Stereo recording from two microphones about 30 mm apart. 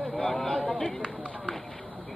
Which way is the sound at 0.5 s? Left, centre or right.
Left.